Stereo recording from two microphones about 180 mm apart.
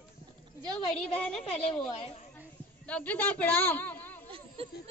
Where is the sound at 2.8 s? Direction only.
10° left (ahead or behind).